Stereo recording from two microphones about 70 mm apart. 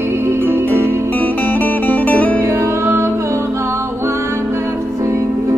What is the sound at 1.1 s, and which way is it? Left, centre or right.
Music, left.